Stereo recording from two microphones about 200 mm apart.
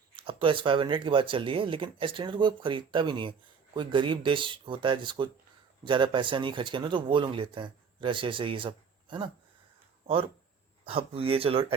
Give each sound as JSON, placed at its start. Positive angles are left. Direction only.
{"t": 0.2, "sound": "speech", "side_deg": -25}
{"t": 10.8, "sound": "speech", "side_deg": -30}